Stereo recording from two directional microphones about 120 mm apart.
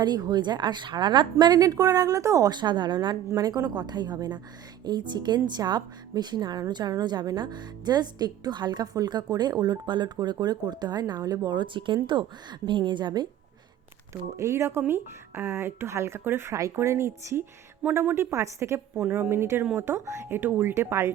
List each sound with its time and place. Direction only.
0.0 s a woman's voice: 35° right (ahead or behind)
14.1 s speech: 25° right (ahead or behind)
18.9 s speech: 10° right (ahead or behind)